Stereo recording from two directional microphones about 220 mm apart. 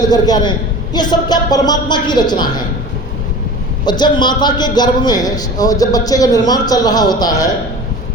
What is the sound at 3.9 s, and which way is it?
A man's voice, 20° left (ahead or behind).